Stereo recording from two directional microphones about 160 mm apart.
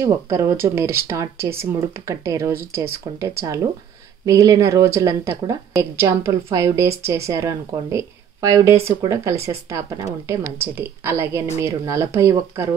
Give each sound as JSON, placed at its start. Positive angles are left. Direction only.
{"t": 0.0, "sound": "a woman's voice", "side_deg": -20}